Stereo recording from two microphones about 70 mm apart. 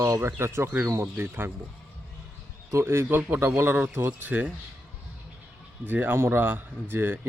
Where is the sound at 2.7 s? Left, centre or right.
Right.